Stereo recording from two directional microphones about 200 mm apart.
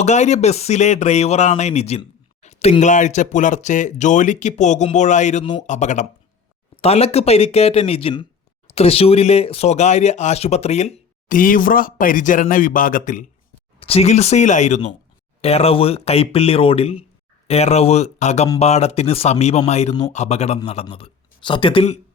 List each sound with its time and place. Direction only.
0.0 s speech: 35° left (ahead or behind)
13.7 s speech: 30° left (ahead or behind)